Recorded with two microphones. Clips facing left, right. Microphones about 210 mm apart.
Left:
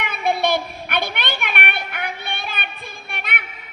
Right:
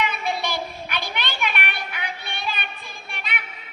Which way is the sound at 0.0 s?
55° left (ahead or behind).